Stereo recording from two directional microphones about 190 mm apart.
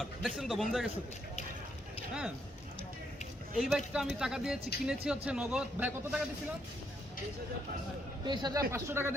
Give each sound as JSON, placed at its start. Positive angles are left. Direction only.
{"t": 0.0, "sound": "speech", "side_deg": 0}
{"t": 3.6, "sound": "speech", "side_deg": 0}
{"t": 8.2, "sound": "a man's voice", "side_deg": -25}
{"t": 8.7, "sound": "speech", "side_deg": -10}